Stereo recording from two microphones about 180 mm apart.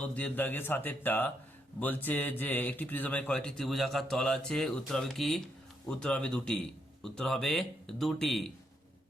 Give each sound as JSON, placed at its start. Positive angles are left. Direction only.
{"t": 0.0, "sound": "a man's voice", "side_deg": 10}